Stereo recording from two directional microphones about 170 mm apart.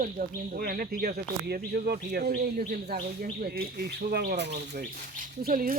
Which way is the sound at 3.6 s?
65° right (ahead or behind).